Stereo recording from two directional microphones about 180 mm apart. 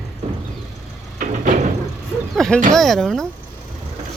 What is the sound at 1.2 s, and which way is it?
Door, 45° right (ahead or behind).